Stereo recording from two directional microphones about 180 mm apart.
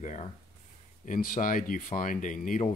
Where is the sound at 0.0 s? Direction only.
40° left (ahead or behind).